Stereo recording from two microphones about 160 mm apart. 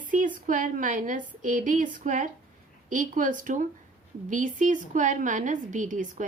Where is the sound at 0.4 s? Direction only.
55° right (ahead or behind).